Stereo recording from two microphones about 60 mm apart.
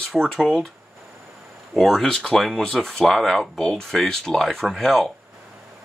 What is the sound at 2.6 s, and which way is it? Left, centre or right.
Speech, centre.